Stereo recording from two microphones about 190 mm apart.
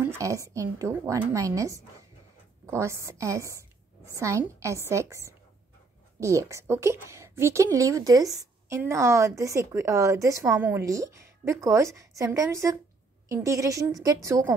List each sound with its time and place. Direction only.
0.0 s a woman's voice: 15° right (ahead or behind)